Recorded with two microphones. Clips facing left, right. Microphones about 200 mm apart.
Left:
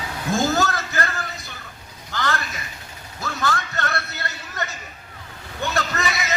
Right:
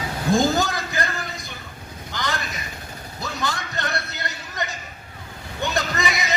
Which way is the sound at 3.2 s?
15° right (ahead or behind).